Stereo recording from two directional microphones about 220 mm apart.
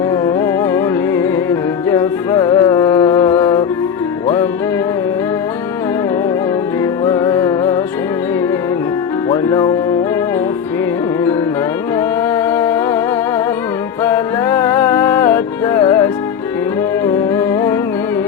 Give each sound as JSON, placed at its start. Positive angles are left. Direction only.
{"t": 0.1, "sound": "music", "side_deg": 10}
{"t": 7.0, "sound": "music", "side_deg": 15}
{"t": 9.3, "sound": "music", "side_deg": 15}
{"t": 11.9, "sound": "music", "side_deg": 10}
{"t": 14.0, "sound": "music", "side_deg": 10}
{"t": 17.1, "sound": "music", "side_deg": 10}